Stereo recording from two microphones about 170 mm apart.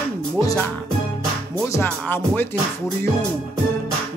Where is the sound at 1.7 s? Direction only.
15° left (ahead or behind).